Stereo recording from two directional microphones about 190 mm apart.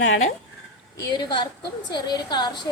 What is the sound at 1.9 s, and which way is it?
Speech, 25° left (ahead or behind).